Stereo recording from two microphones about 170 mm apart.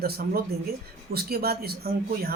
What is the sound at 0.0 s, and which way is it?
Speech, 65° right (ahead or behind).